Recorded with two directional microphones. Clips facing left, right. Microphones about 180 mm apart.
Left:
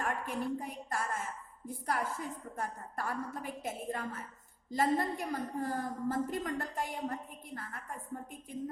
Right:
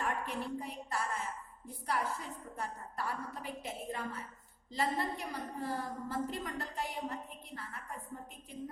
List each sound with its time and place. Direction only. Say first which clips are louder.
0.0 s a woman's voice: left 2 dB; 45° left (ahead or behind)